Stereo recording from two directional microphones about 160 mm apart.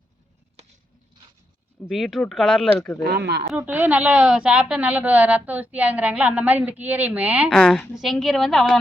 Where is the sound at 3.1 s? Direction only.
90° right.